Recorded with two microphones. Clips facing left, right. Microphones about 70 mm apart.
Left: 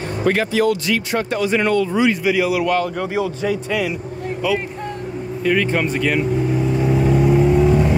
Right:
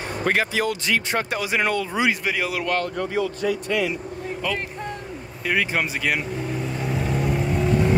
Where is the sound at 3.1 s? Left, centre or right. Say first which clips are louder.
Left 2 dB; centre.